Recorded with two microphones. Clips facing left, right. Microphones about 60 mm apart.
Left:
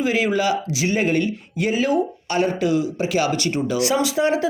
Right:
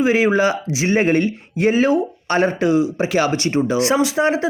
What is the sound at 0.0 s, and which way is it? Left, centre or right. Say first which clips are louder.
Speech: right 4 dB; right.